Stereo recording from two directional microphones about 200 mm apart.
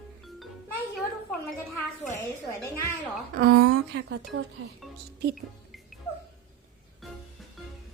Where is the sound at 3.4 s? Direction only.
50° right (ahead or behind).